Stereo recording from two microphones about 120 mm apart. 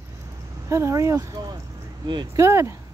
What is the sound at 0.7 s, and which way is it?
Speech, 25° right (ahead or behind).